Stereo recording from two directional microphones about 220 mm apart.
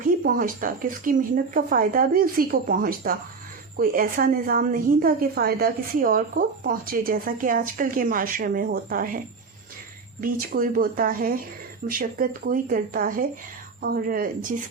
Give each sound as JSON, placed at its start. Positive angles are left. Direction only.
{"t": 0.0, "sound": "a woman's voice", "side_deg": -40}